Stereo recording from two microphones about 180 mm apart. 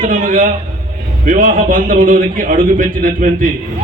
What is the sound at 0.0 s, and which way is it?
A man's voice, 45° right (ahead or behind).